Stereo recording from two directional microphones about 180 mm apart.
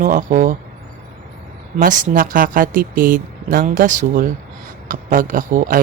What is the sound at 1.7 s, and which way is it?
A woman's voice, 45° right (ahead or behind).